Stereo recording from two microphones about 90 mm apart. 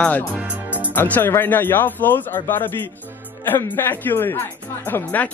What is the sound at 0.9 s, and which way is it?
Speech, 20° left (ahead or behind).